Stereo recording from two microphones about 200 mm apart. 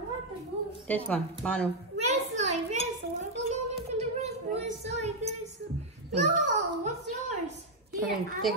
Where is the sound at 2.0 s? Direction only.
35° right (ahead or behind).